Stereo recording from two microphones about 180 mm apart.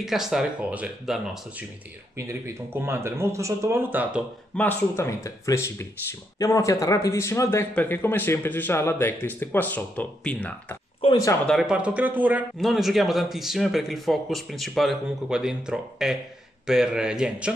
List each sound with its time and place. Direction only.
0.0 s a man's voice: centre (ahead or behind)
2.1 s speech: 15° right (ahead or behind)
4.6 s speech: 10° left (ahead or behind)
11.0 s speech: 25° left (ahead or behind)
11.4 s a man's voice: centre (ahead or behind)